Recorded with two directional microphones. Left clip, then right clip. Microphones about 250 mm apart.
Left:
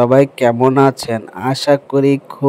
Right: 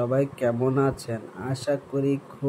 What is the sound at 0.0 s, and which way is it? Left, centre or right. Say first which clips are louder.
Speech: left 13 dB; left.